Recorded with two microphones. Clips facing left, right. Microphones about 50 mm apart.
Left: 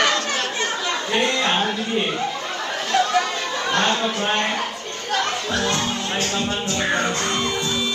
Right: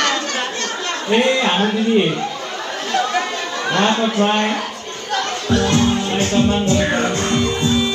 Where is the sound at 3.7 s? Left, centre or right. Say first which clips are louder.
Right 4 dB; centre.